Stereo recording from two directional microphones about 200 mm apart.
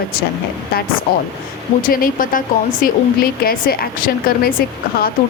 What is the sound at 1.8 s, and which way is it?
Speech, 45° left (ahead or behind).